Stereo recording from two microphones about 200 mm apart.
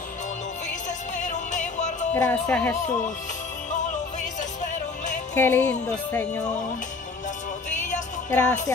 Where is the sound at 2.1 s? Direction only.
10° left (ahead or behind).